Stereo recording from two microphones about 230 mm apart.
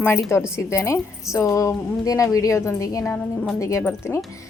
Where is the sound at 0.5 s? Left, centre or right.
Centre.